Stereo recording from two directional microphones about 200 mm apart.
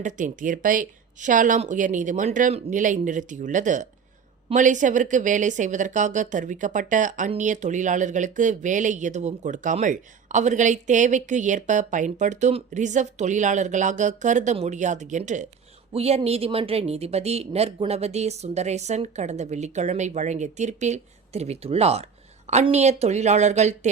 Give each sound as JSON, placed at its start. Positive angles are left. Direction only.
{"t": 0.0, "sound": "speech", "side_deg": -40}